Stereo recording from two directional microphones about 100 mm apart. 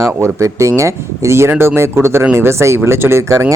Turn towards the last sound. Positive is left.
turn(degrees=-25)  # may be behind; listen again after turning